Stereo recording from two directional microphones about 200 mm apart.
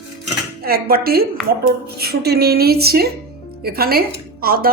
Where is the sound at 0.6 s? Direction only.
50° right (ahead or behind).